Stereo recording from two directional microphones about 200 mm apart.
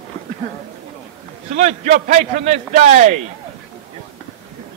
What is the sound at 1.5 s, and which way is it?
A man's voice, 35° right (ahead or behind).